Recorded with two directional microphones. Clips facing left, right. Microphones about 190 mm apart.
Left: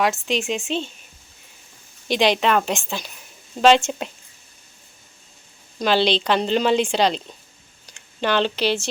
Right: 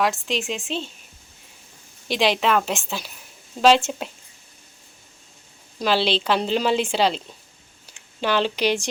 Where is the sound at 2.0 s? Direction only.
Centre (ahead or behind).